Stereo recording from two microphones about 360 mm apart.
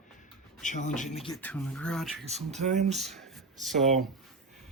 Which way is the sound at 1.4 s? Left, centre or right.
Centre.